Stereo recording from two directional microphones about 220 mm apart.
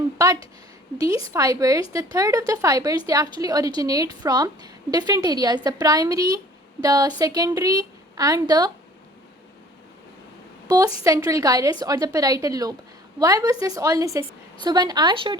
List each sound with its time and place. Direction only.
0.2 s a woman's voice: 15° right (ahead or behind)
10.7 s a woman's voice: 15° right (ahead or behind)